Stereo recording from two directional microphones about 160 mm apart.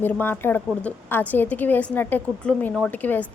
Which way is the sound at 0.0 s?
10° left (ahead or behind).